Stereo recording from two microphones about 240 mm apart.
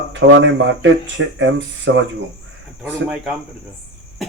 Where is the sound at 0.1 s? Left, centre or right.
Right.